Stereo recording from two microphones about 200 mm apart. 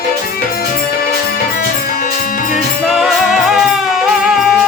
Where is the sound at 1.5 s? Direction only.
45° left (ahead or behind).